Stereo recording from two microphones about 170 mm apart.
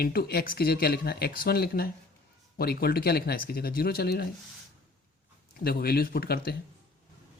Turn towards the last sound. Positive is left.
turn(degrees=65)  # may be behind; listen again after turning